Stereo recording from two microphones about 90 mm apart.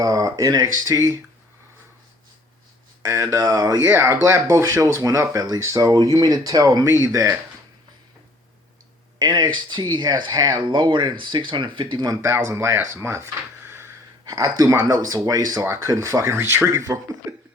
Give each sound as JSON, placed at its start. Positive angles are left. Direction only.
{"t": 0.0, "sound": "speech", "side_deg": -40}
{"t": 3.0, "sound": "speech", "side_deg": -35}
{"t": 3.8, "sound": "speech", "side_deg": -30}
{"t": 9.1, "sound": "speech", "side_deg": -50}
{"t": 12.0, "sound": "speech", "side_deg": -35}
{"t": 14.3, "sound": "speech", "side_deg": -40}
{"t": 16.3, "sound": "speech", "side_deg": -25}